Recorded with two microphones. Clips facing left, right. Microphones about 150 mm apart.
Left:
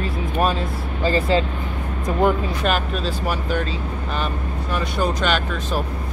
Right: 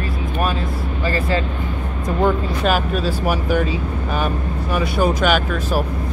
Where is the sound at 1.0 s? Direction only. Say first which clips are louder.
Left 3 dB; 25° left (ahead or behind).